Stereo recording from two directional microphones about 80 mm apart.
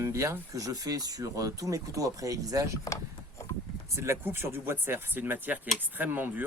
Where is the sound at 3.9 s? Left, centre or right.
Right.